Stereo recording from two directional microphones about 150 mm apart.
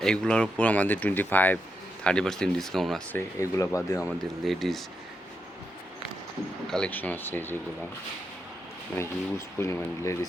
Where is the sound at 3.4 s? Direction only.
20° left (ahead or behind).